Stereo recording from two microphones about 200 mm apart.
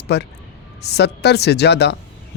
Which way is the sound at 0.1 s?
55° left (ahead or behind).